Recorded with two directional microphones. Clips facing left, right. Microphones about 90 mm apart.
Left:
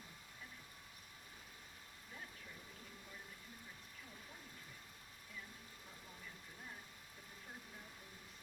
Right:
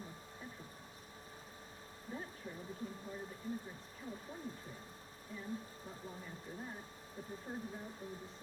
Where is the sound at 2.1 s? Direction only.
35° right (ahead or behind).